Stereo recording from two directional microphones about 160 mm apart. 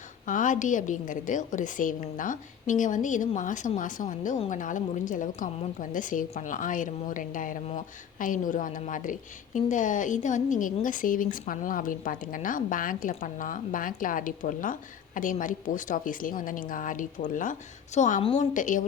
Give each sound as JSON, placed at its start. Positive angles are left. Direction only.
{"t": 0.3, "sound": "a woman's voice", "side_deg": 55}
{"t": 18.2, "sound": "a woman's voice", "side_deg": 35}
{"t": 18.5, "sound": "a woman's voice", "side_deg": 55}